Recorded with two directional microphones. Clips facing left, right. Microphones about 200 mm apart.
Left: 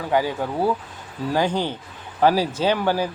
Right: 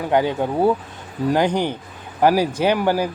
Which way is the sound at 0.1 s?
20° right (ahead or behind).